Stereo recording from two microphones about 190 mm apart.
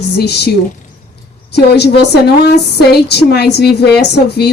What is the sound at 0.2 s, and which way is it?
Speech, 60° left (ahead or behind).